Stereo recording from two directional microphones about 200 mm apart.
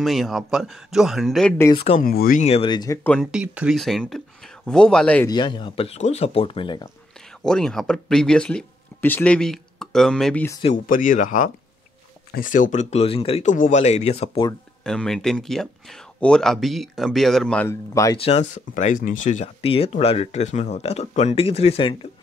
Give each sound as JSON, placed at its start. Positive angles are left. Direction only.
{"t": 0.0, "sound": "speech", "side_deg": 0}
{"t": 1.6, "sound": "speech", "side_deg": 25}
{"t": 2.0, "sound": "speech", "side_deg": 45}
{"t": 2.4, "sound": "speech", "side_deg": 30}
{"t": 3.1, "sound": "speech", "side_deg": 0}
{"t": 5.3, "sound": "speech", "side_deg": 25}
{"t": 7.2, "sound": "speech", "side_deg": 5}
{"t": 10.6, "sound": "speech", "side_deg": 40}
{"t": 14.8, "sound": "speech", "side_deg": 5}
{"t": 18.2, "sound": "speech", "side_deg": 35}